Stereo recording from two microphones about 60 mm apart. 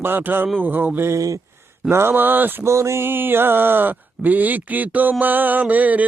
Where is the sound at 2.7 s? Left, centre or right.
Right.